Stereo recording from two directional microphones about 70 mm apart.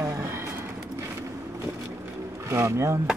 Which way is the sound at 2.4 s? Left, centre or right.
Right.